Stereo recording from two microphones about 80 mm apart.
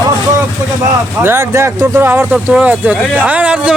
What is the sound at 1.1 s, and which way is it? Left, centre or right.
A man's voice, right.